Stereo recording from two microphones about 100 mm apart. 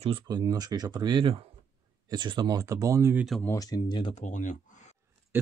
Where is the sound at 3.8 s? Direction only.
55° left (ahead or behind).